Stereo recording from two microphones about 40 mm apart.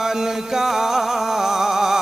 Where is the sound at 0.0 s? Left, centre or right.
Centre.